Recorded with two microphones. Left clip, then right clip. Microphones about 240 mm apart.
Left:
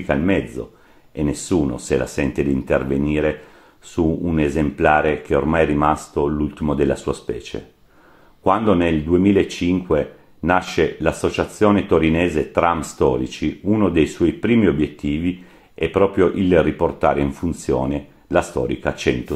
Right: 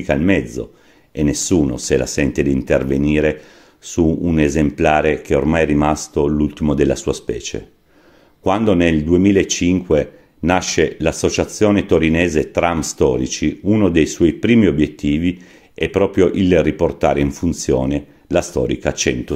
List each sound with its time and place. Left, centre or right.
0.0 s speech: right